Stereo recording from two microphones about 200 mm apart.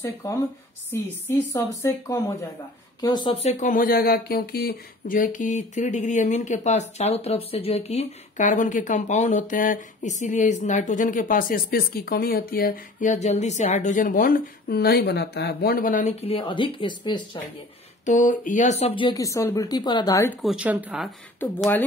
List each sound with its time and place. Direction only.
0.0 s speech: 15° left (ahead or behind)
18.0 s speech: 40° left (ahead or behind); by 20.3 s 15° left (ahead or behind)
20.4 s speech: 5° right (ahead or behind)